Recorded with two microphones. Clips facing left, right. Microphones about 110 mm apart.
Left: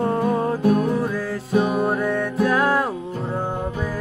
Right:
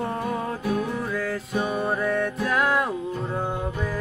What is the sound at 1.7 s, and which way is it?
Music, 5° left (ahead or behind).